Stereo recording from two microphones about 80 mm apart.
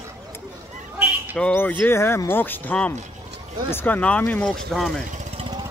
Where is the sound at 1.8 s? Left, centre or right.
Left; by 4.5 s centre.